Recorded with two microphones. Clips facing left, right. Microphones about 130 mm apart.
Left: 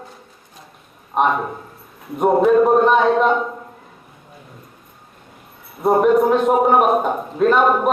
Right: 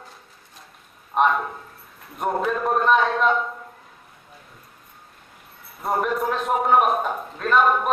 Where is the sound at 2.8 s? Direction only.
25° left (ahead or behind).